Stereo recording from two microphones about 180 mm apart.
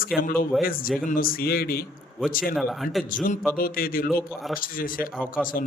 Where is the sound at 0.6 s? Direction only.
55° left (ahead or behind).